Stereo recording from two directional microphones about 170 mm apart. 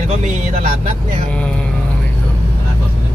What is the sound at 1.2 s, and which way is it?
Speech, 5° left (ahead or behind).